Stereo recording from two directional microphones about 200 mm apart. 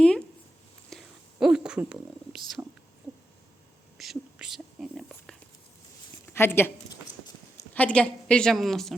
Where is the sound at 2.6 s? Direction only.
15° right (ahead or behind).